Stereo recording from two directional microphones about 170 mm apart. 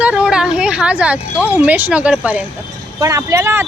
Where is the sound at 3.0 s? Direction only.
20° right (ahead or behind).